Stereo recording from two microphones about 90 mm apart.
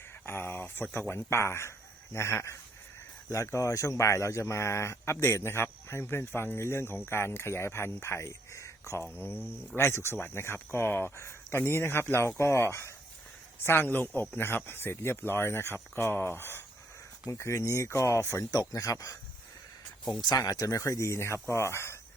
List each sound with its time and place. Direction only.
0.3 s speech: 25° left (ahead or behind)
9.1 s speech: 25° left (ahead or behind); by 19.1 s 40° left (ahead or behind)
20.2 s speech: 45° left (ahead or behind); by 21.9 s 30° left (ahead or behind)